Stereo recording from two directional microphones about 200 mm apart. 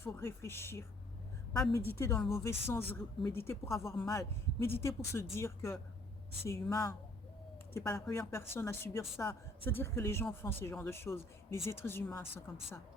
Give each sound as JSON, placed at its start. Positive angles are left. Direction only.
{"t": 0.0, "sound": "speech", "side_deg": 10}
{"t": 1.9, "sound": "speech", "side_deg": 10}
{"t": 3.8, "sound": "a man's voice", "side_deg": 0}
{"t": 4.1, "sound": "speech", "side_deg": 15}